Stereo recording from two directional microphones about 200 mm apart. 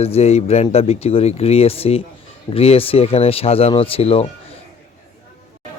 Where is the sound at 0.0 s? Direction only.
30° left (ahead or behind).